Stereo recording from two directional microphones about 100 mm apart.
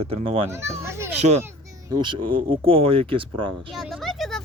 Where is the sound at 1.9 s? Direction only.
55° right (ahead or behind).